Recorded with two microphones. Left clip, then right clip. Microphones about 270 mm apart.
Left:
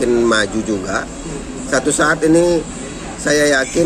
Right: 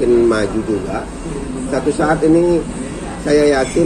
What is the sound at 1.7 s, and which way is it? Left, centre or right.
Speech, left.